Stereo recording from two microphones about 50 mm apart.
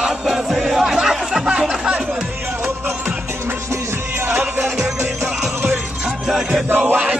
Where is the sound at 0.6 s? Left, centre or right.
Centre.